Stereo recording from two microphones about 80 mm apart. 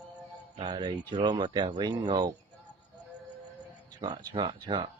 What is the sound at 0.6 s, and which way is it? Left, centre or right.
A man's voice, right.